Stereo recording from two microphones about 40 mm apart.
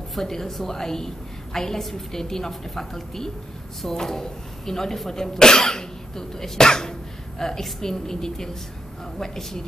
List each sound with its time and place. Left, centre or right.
0.1 s a woman's voice: centre